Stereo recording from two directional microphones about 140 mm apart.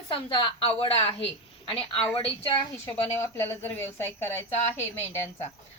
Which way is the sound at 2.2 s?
35° left (ahead or behind).